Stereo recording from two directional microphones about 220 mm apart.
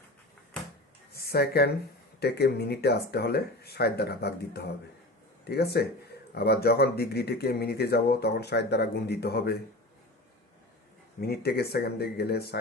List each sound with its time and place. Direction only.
1.1 s speech: 45° left (ahead or behind)
11.2 s speech: 45° left (ahead or behind)